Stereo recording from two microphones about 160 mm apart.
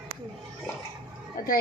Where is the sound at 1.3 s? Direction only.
65° left (ahead or behind).